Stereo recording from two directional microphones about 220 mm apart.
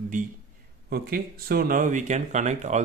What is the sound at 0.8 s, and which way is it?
Speech, 45° right (ahead or behind).